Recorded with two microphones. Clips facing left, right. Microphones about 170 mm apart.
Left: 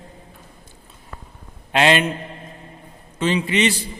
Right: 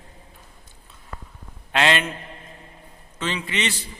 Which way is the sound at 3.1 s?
15° left (ahead or behind).